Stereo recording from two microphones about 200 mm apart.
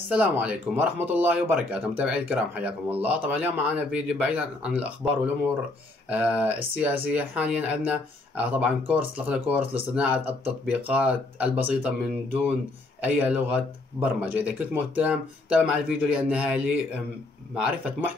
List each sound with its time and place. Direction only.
0.1 s speech: 5° right (ahead or behind)
13.0 s speech: 5° right (ahead or behind)